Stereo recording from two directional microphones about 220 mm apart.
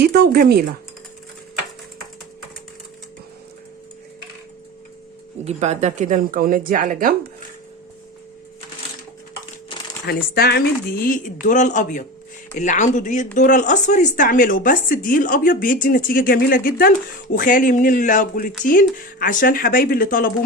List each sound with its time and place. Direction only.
0.0 s speech: 45° right (ahead or behind)
5.5 s speech: 30° right (ahead or behind)
9.7 s crumpling: 25° left (ahead or behind)
10.1 s speech: 45° left (ahead or behind)